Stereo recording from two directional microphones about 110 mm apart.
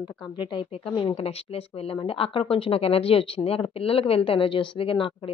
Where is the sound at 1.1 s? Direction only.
65° left (ahead or behind).